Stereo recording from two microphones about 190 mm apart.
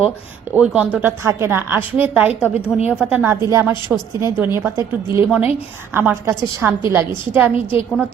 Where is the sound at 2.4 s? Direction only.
15° left (ahead or behind).